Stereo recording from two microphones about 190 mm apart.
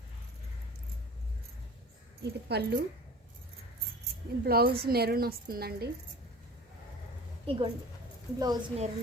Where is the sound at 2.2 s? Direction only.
60° right (ahead or behind).